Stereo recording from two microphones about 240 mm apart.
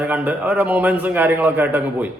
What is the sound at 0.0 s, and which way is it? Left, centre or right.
A man's voice, centre.